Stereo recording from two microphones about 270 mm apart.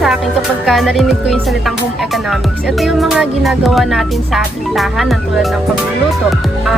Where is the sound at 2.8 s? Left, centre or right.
Centre.